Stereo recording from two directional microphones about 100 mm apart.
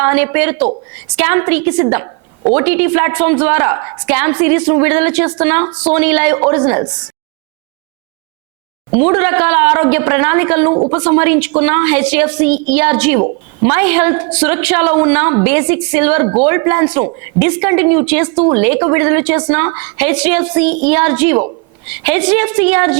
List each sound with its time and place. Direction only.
0.0 s a woman's voice: 20° right (ahead or behind)
9.0 s a woman's voice: 25° right (ahead or behind)
10.8 s a woman's voice: 40° right (ahead or behind)
11.0 s a woman's voice: 25° right (ahead or behind)